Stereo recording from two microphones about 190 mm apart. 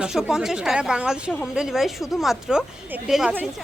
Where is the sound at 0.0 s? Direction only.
5° right (ahead or behind).